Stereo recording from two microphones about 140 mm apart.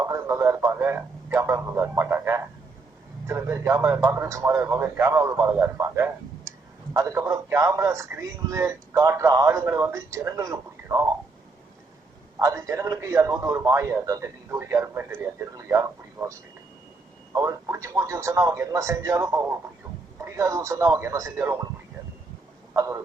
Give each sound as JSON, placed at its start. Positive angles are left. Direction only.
{"t": 0.0, "sound": "a man's voice", "side_deg": -20}
{"t": 12.4, "sound": "a man's voice", "side_deg": -20}
{"t": 17.3, "sound": "a man's voice", "side_deg": -20}
{"t": 22.7, "sound": "a sound", "side_deg": -25}